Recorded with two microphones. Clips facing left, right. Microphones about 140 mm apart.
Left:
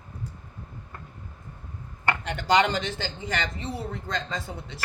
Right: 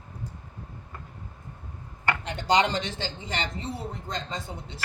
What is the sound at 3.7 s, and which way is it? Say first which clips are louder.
Speech: left 2 dB; 70° left (ahead or behind).